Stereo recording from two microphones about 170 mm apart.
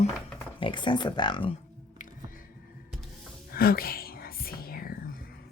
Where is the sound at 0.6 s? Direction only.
30° left (ahead or behind).